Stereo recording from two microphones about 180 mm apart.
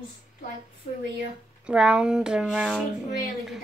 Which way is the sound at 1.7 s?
5° right (ahead or behind).